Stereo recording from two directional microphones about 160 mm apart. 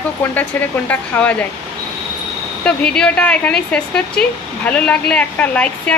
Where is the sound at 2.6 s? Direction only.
5° left (ahead or behind).